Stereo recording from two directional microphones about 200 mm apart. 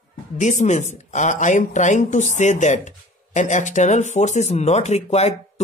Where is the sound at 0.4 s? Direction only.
35° left (ahead or behind).